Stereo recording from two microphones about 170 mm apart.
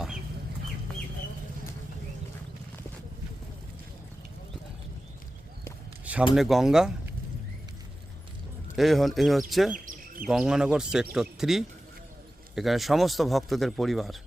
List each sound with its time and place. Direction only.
6.3 s speech: centre (ahead or behind)
8.7 s speech: centre (ahead or behind)
9.7 s bird: 50° right (ahead or behind)
10.2 s speech: 5° right (ahead or behind)